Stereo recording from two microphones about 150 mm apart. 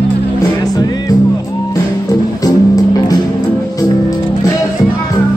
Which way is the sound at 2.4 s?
25° left (ahead or behind).